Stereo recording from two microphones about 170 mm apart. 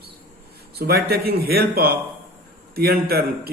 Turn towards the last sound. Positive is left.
turn(degrees=-60)  # may be behind; listen again after turning